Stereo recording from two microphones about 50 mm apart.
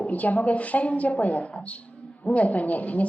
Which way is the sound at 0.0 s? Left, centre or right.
Left.